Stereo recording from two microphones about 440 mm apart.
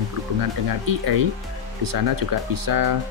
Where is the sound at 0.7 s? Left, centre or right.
Right.